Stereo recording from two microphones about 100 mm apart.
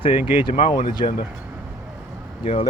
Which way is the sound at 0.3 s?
60° left (ahead or behind).